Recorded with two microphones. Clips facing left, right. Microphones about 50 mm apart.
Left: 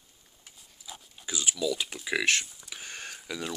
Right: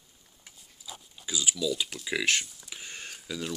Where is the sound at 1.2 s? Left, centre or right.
Left.